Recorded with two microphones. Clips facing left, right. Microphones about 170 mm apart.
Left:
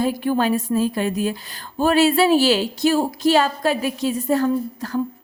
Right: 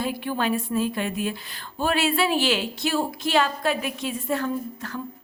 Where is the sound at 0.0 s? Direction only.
40° left (ahead or behind).